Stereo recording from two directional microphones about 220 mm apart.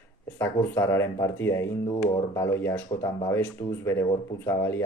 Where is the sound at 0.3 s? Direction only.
10° left (ahead or behind).